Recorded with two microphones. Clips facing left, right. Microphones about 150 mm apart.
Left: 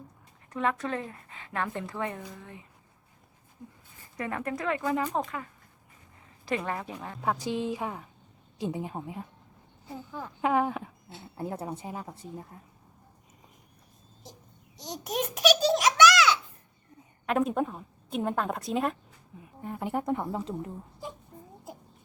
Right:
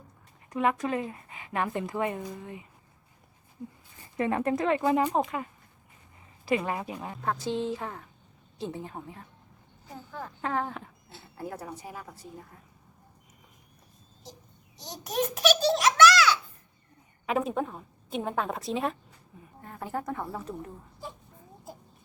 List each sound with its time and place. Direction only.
0.5 s a woman's voice: 10° right (ahead or behind)
4.2 s speech: 25° right (ahead or behind)
6.4 s a woman's voice: 10° right (ahead or behind)
7.2 s a woman's voice: 10° left (ahead or behind)
11.3 s speech: 25° left (ahead or behind)
14.8 s a sound: 20° left (ahead or behind)
17.2 s a woman's voice: centre (ahead or behind)
19.6 s speech: 15° left (ahead or behind)